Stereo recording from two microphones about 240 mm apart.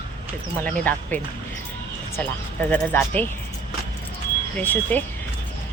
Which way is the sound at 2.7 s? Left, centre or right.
Centre.